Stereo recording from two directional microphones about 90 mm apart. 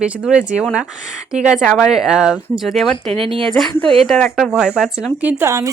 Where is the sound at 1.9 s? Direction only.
5° right (ahead or behind).